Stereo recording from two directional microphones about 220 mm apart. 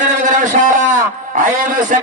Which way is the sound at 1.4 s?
35° right (ahead or behind).